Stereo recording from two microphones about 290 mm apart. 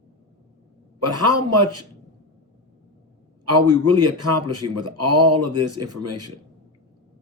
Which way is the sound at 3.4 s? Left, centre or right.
Right.